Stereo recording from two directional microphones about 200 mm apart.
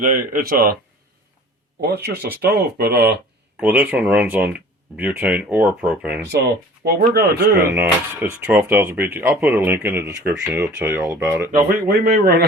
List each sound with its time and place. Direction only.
0.0 s speech: 45° right (ahead or behind)
2.4 s speech: 55° right (ahead or behind)
3.6 s speech: 5° right (ahead or behind)
6.8 s speech: 50° right (ahead or behind)
7.5 s speech: 10° right (ahead or behind)
11.5 s speech: 45° right (ahead or behind)